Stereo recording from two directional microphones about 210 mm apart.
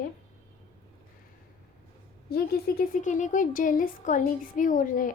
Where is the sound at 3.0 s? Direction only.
35° left (ahead or behind).